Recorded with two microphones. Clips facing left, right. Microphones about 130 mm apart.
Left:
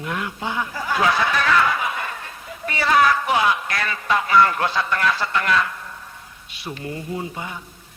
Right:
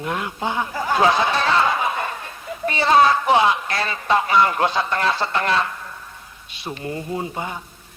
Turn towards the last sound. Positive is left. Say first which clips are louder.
# right 2 dB
turn(degrees=-35)  # may be behind; listen again after turning